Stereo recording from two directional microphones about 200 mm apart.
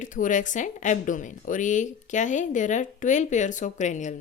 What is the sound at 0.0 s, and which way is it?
A woman's voice, 40° left (ahead or behind).